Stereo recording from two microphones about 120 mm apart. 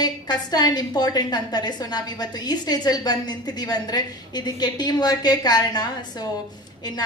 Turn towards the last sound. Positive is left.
turn(degrees=35)  # may be behind; listen again after turning